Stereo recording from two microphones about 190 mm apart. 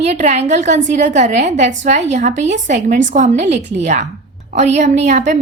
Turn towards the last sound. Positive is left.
turn(degrees=-40)  # may be behind; listen again after turning